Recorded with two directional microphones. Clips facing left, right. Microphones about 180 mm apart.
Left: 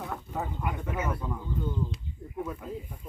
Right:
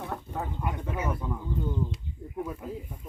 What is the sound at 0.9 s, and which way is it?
Speech, 10° right (ahead or behind).